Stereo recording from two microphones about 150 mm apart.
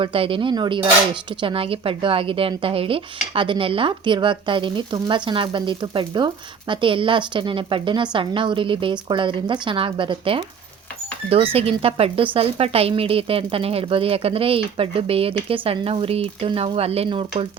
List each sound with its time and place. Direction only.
0.0 s speech: 35° right (ahead or behind)